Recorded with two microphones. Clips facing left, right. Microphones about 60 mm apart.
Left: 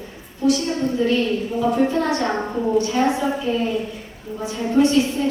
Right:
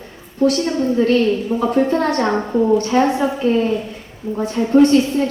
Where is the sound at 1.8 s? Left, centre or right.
Right.